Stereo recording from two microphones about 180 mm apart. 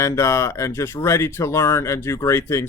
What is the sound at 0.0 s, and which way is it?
Speech, 15° left (ahead or behind).